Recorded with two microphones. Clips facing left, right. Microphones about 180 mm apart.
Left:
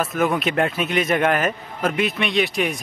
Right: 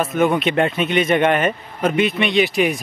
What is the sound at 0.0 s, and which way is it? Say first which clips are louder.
Speech: right 3 dB; centre (ahead or behind).